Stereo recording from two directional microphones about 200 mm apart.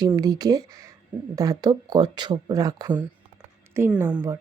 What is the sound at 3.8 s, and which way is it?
Speech, 10° right (ahead or behind).